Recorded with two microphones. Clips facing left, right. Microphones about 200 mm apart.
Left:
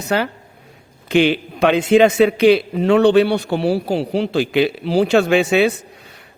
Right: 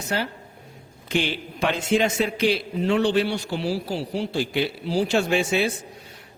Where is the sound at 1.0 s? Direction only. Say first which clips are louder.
Left 10 dB; 65° left (ahead or behind).